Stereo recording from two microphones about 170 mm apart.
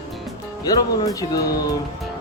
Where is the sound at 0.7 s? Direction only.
20° left (ahead or behind).